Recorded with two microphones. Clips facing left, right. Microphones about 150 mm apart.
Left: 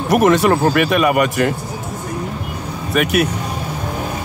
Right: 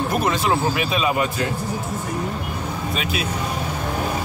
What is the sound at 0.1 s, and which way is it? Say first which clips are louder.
Speech: left 12 dB; 75° left (ahead or behind).